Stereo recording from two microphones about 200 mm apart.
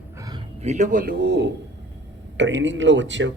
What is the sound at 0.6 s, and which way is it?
A man's voice, 35° right (ahead or behind).